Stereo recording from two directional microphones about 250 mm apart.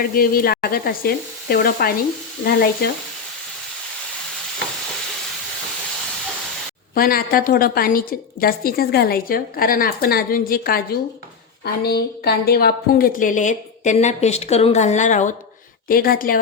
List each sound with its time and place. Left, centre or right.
0.0 s a woman's voice: left
6.9 s a woman's voice: left